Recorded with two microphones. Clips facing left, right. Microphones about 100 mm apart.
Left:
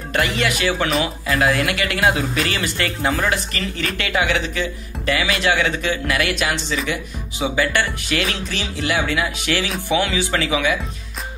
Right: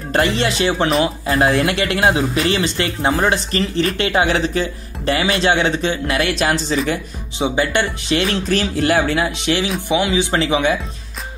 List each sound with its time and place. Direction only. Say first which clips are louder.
0.1 s speech: right 3 dB; 30° right (ahead or behind)
7.3 s speech: right 2 dB; 25° right (ahead or behind)
9.8 s speech: right 3 dB; 15° right (ahead or behind)
10.3 s speech: right 2 dB; 30° right (ahead or behind)